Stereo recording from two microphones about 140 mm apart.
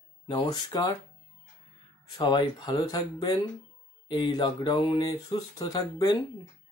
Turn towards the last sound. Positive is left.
turn(degrees=25)  # may be behind; listen again after turning